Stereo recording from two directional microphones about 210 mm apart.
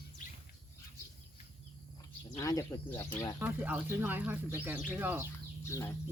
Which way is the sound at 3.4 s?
5° right (ahead or behind).